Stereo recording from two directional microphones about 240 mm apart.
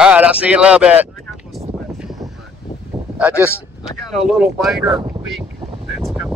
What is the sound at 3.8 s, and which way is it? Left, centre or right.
Speech, centre.